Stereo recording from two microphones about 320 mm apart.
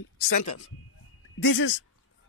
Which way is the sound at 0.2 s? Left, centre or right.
Left.